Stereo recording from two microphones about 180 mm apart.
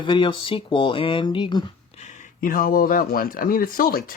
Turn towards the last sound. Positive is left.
turn(degrees=55)  # may be behind; listen again after turning